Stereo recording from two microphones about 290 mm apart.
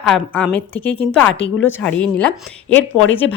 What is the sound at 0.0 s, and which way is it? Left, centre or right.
A woman's voice, centre.